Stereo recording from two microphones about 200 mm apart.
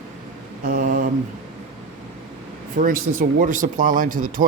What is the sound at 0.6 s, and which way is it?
Speech, 45° right (ahead or behind).